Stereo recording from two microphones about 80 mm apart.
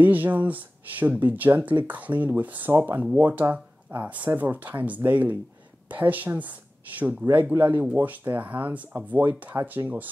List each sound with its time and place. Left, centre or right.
0.0 s speech: right